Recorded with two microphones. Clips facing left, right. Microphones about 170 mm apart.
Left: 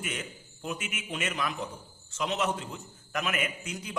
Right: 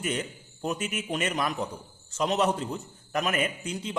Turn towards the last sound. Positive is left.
turn(degrees=-30)  # may be behind; listen again after turning